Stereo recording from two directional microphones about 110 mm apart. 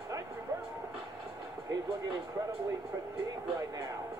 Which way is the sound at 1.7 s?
30° right (ahead or behind).